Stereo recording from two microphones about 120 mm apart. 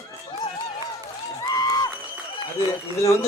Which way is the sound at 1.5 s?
30° left (ahead or behind).